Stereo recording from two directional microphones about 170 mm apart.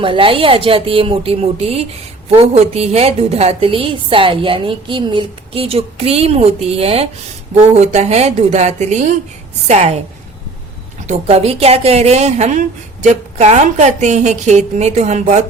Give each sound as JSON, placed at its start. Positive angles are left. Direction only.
{"t": 0.0, "sound": "a woman's voice", "side_deg": -30}
{"t": 11.0, "sound": "a woman's voice", "side_deg": -40}